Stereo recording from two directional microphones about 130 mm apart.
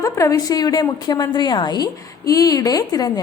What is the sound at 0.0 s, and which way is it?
A woman's voice, 25° left (ahead or behind).